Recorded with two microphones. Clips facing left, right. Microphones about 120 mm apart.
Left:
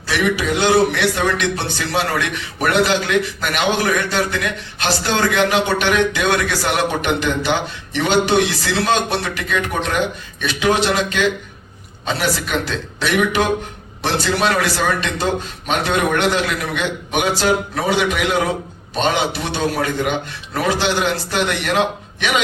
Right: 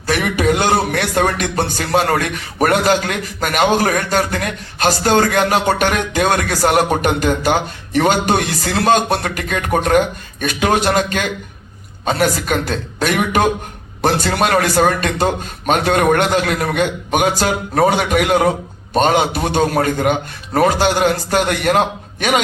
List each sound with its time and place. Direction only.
0.1 s a man's voice: 50° right (ahead or behind)